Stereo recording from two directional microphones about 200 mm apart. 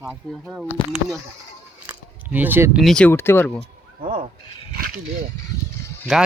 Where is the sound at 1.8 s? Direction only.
10° right (ahead or behind).